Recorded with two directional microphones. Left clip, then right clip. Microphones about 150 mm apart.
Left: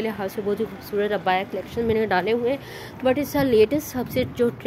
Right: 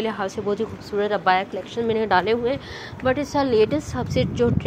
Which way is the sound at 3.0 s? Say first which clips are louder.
Even; 25° left (ahead or behind).